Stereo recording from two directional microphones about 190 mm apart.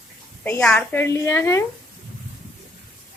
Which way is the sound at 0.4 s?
5° left (ahead or behind).